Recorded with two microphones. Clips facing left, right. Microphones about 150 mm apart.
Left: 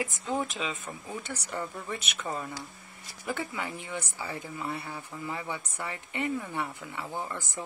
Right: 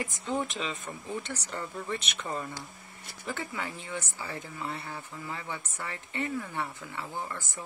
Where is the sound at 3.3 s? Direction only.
15° left (ahead or behind).